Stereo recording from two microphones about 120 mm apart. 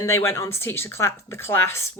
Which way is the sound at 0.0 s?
20° left (ahead or behind).